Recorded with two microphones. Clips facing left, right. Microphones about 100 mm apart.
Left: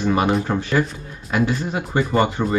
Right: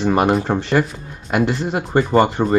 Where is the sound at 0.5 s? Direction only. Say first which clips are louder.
Right 3 dB; 70° right (ahead or behind).